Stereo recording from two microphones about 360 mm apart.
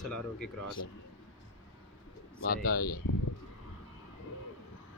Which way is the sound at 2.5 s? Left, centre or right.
Left.